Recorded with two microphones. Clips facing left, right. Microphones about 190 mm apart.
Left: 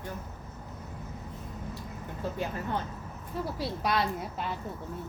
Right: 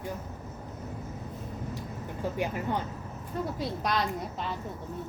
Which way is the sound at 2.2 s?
15° right (ahead or behind).